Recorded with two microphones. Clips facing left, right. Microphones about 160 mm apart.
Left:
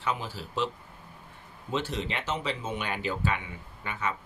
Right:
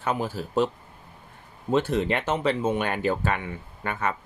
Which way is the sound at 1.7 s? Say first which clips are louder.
Right 8 dB; 50° right (ahead or behind).